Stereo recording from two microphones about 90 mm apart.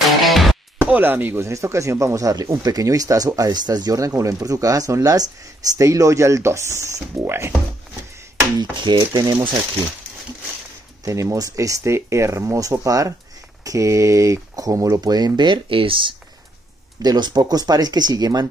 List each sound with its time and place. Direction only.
0.2 s music: centre (ahead or behind)
0.7 s speech: 20° right (ahead or behind)
8.5 s speech: 55° right (ahead or behind)
11.1 s speech: 35° right (ahead or behind); by 16.2 s 70° right (ahead or behind)
17.0 s speech: 50° right (ahead or behind)